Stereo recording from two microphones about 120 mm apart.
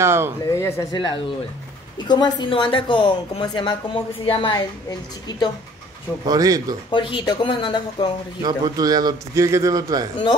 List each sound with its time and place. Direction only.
0.0 s speech: 20° right (ahead or behind)
0.4 s speech: 25° left (ahead or behind)
0.9 s speech: 40° left (ahead or behind)
6.2 s a man's voice: 30° right (ahead or behind)
6.9 s speech: 40° left (ahead or behind)
8.4 s a man's voice: 35° right (ahead or behind)